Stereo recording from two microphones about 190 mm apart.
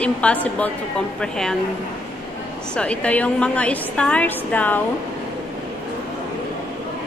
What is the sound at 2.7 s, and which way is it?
A woman's voice, 5° left (ahead or behind).